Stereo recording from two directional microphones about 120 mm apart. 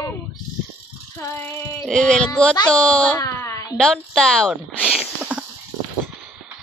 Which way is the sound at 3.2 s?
25° left (ahead or behind).